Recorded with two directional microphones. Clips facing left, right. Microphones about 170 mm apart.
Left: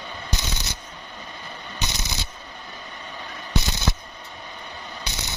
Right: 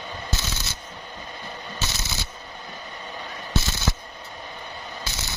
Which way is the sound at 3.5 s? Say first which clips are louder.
Left 1 dB; 15° left (ahead or behind).